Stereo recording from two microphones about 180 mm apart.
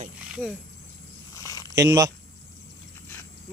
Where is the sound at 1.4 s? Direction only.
20° left (ahead or behind).